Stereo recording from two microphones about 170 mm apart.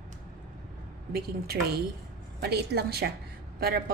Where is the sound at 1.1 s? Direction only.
65° right (ahead or behind).